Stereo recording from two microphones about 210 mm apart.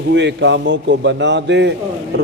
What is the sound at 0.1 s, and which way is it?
Speech, 55° right (ahead or behind).